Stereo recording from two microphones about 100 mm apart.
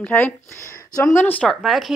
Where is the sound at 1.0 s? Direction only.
30° left (ahead or behind).